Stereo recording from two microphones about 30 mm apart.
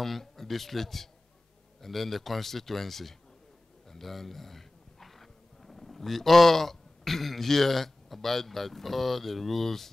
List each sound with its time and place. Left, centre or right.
0.0 s a man's voice: centre